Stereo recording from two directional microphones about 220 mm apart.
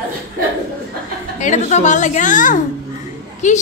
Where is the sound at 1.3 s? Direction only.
35° left (ahead or behind).